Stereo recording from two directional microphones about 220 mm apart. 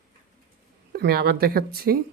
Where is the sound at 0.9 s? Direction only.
45° right (ahead or behind).